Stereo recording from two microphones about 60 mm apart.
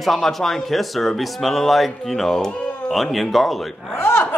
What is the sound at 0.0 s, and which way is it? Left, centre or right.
A man's voice, centre.